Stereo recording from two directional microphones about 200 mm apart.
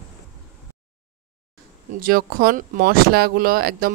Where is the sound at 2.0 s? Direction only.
45° right (ahead or behind).